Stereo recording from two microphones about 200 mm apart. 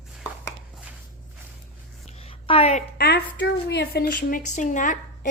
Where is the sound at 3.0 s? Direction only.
55° left (ahead or behind).